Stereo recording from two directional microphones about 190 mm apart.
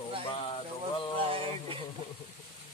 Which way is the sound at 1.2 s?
30° right (ahead or behind).